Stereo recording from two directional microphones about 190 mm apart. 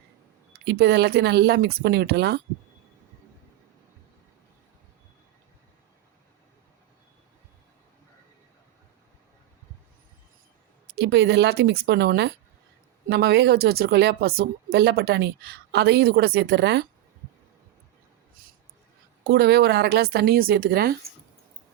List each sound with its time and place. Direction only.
0.6 s a woman's voice: 60° right (ahead or behind)
10.8 s a woman's voice: 60° right (ahead or behind)
19.2 s a woman's voice: 55° right (ahead or behind)